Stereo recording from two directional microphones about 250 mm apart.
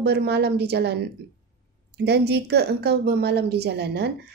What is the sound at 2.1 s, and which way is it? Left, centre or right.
A woman's voice, right.